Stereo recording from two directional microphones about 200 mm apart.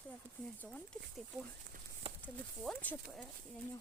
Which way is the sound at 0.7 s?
5° left (ahead or behind).